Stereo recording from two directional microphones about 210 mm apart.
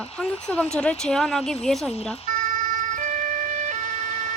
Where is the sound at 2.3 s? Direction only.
35° right (ahead or behind).